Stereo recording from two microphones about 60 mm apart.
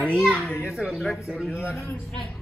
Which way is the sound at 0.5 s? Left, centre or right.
Left.